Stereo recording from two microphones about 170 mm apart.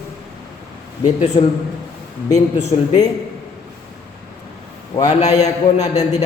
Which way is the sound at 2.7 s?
35° left (ahead or behind).